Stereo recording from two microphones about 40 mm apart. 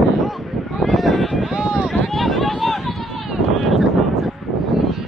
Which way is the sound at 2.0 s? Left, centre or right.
Centre.